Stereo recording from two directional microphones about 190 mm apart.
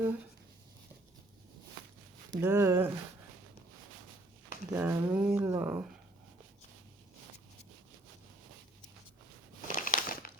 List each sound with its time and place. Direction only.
2.3 s speech: 10° right (ahead or behind)
4.7 s speech: 10° right (ahead or behind)
9.6 s crumpling: 45° left (ahead or behind)